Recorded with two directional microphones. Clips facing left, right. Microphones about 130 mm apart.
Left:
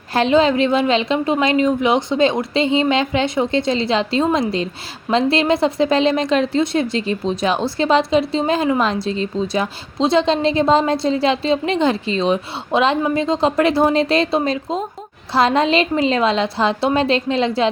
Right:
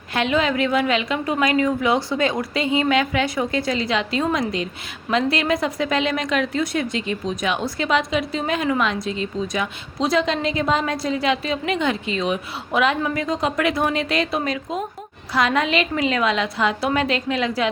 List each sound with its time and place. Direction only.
0.1 s a woman's voice: 30° left (ahead or behind)